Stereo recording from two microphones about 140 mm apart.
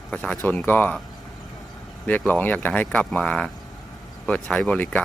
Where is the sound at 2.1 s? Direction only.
15° left (ahead or behind).